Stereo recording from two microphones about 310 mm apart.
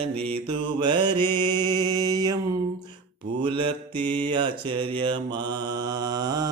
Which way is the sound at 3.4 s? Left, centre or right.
Centre.